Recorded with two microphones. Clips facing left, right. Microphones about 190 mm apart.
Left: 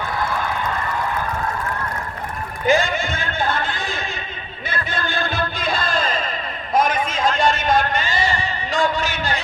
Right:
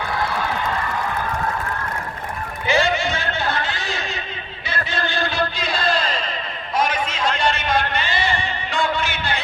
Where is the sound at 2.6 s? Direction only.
50° left (ahead or behind).